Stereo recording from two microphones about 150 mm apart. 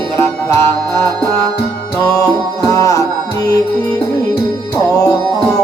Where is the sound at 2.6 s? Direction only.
20° left (ahead or behind).